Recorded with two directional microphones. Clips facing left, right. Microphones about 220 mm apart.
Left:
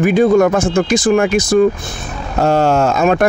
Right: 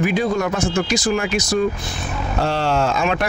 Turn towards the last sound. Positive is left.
turn(degrees=45)  # may be behind; listen again after turning